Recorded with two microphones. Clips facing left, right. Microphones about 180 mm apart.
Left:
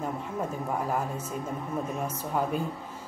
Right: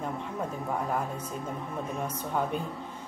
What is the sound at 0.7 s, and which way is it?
A woman's voice, 5° left (ahead or behind).